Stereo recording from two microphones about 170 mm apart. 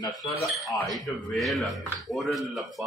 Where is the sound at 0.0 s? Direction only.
20° left (ahead or behind).